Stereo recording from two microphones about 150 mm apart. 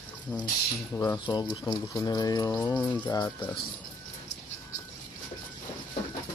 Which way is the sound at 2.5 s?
10° left (ahead or behind).